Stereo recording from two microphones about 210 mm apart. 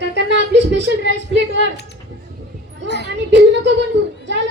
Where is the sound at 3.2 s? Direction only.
55° right (ahead or behind).